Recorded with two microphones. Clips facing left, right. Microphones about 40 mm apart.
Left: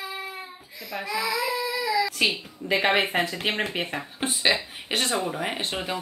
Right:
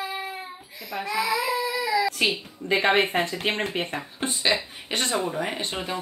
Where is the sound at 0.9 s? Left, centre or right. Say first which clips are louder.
Right 2 dB; centre.